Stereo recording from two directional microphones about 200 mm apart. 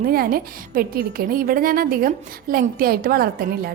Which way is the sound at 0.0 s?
50° right (ahead or behind).